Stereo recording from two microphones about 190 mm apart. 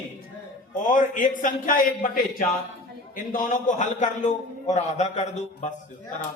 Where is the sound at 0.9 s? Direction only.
40° left (ahead or behind).